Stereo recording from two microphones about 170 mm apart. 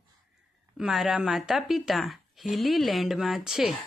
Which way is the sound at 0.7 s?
5° right (ahead or behind).